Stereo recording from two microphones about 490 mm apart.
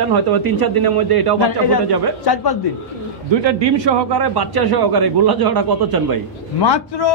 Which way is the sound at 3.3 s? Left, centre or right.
Right.